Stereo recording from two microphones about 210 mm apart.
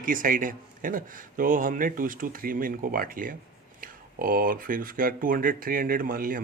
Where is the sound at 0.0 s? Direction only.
40° right (ahead or behind).